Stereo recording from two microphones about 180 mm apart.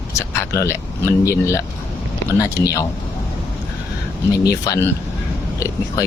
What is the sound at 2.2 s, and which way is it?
Speech, 20° left (ahead or behind).